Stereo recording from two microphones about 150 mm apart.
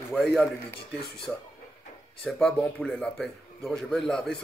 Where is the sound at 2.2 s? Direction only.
5° left (ahead or behind).